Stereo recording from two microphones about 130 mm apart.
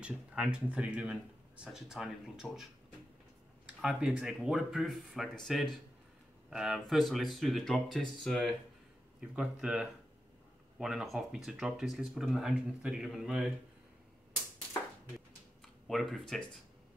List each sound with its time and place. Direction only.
0.0 s speech: 10° right (ahead or behind)
3.8 s speech: 5° right (ahead or behind)
15.9 s speech: centre (ahead or behind)